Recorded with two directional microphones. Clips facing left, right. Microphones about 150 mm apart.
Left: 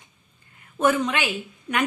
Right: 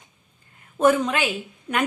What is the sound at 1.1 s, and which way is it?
Speech, 35° right (ahead or behind).